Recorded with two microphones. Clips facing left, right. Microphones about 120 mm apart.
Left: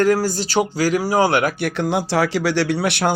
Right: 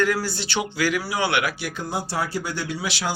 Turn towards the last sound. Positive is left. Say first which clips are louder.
# left 8 dB
turn(degrees=60)  # may be behind; listen again after turning